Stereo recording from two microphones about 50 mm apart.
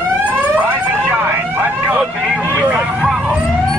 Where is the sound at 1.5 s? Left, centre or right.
Right.